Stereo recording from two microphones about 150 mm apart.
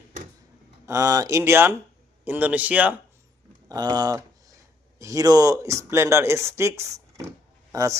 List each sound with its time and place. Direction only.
0.9 s speech: 20° right (ahead or behind)
3.7 s speech: 25° right (ahead or behind)